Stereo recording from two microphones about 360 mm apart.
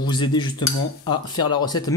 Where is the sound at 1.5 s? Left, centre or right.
Centre.